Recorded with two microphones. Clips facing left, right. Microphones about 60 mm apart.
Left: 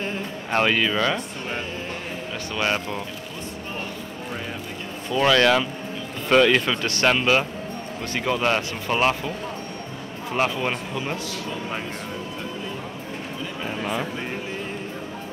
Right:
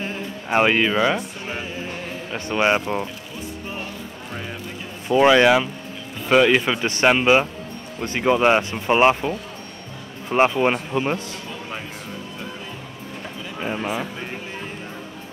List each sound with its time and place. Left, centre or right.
0.0 s music: centre
2.3 s speech: right
5.1 s speech: centre
10.3 s speech: right
13.7 s speech: centre